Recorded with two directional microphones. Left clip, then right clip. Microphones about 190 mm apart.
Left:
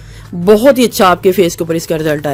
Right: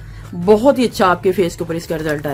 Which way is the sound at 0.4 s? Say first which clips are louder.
Left 4 dB; 40° left (ahead or behind).